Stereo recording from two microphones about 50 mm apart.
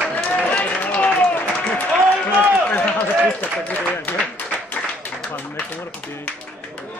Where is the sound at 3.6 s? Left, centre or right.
Left.